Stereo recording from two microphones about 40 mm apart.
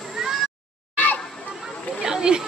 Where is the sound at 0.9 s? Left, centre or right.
Left.